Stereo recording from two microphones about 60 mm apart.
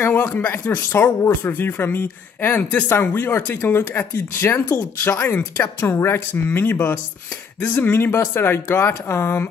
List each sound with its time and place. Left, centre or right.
0.0 s speech: left